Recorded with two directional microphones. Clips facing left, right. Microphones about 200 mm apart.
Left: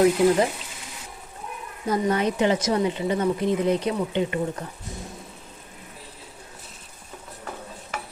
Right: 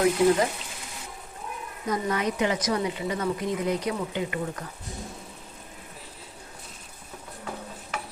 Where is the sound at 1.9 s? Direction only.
30° left (ahead or behind).